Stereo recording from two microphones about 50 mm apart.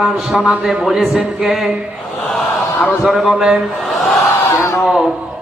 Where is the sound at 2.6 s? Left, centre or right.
Left.